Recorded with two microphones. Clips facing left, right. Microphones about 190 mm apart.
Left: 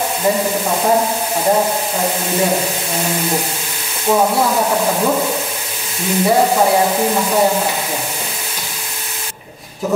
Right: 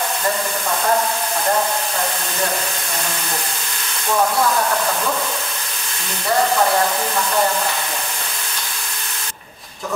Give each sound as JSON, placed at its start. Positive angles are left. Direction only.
{"t": 0.2, "sound": "speech", "side_deg": 15}
{"t": 4.2, "sound": "speech", "side_deg": 20}
{"t": 6.2, "sound": "speech", "side_deg": 15}